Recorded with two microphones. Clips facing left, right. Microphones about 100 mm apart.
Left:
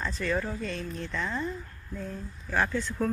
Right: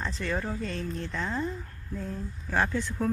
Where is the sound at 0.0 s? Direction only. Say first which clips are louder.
Left 2 dB; 20° right (ahead or behind).